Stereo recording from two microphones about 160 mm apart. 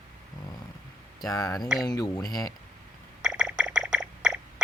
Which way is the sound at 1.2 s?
20° left (ahead or behind).